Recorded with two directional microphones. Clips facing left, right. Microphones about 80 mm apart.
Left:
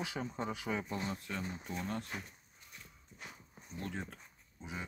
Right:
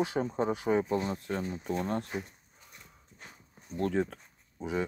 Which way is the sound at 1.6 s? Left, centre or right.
Right.